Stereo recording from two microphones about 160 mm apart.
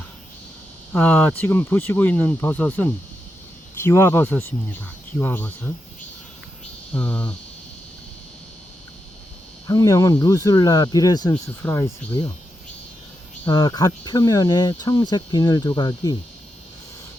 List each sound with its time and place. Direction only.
0.9 s speech: 10° left (ahead or behind)
6.9 s speech: 10° left (ahead or behind)
9.6 s speech: 20° left (ahead or behind)
13.5 s speech: 25° left (ahead or behind)